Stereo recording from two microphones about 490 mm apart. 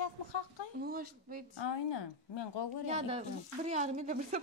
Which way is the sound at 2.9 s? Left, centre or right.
Centre.